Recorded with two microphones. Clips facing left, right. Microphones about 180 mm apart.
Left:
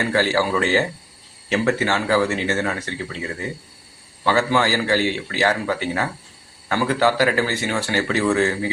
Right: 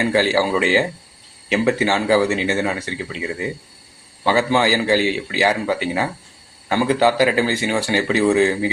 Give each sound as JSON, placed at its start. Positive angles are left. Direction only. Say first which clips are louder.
{"t": 0.0, "sound": "speech", "louder": "right 2 dB", "side_deg": -15}